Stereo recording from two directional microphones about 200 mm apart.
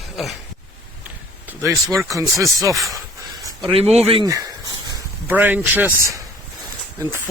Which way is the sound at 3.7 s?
30° right (ahead or behind).